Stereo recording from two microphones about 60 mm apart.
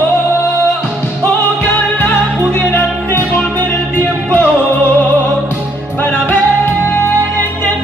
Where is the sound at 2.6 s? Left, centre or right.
Left.